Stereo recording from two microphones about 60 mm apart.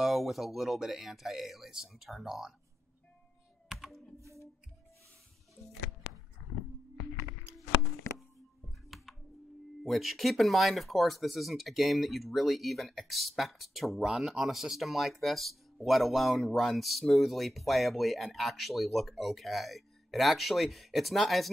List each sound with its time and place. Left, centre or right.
0.0 s speech: centre
3.6 s computer keyboard: centre
8.8 s music: centre
9.8 s speech: centre
14.0 s speech: centre